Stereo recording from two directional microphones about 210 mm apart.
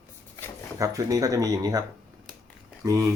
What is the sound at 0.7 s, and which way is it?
Speech, 15° right (ahead or behind).